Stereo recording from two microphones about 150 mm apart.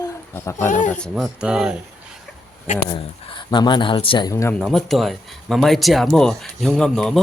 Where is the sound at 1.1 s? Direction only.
5° right (ahead or behind).